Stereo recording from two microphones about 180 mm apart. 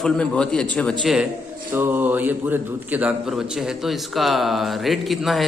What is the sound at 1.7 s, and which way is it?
A man's voice, 10° right (ahead or behind).